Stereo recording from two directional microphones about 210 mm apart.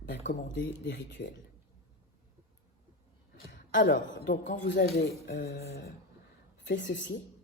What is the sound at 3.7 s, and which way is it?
A man's voice, 40° left (ahead or behind).